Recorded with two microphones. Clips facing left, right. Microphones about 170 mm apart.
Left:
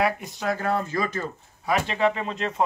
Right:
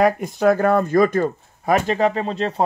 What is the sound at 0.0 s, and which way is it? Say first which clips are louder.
Speech: right 9 dB; 50° right (ahead or behind).